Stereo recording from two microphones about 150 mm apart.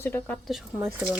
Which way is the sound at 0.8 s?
10° right (ahead or behind).